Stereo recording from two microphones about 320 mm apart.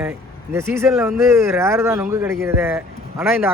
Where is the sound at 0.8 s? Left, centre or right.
Centre.